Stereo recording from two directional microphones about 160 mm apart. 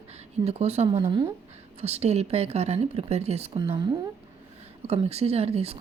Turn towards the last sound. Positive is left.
turn(degrees=-40)  # may be behind; listen again after turning